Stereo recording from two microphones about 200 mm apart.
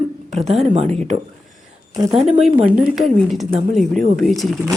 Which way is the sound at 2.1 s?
Centre (ahead or behind).